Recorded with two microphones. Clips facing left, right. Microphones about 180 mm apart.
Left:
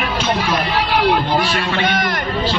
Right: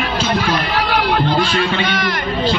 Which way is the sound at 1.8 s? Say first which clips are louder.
Left 1 dB; 50° left (ahead or behind).